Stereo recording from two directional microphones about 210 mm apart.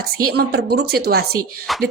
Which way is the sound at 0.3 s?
50° right (ahead or behind).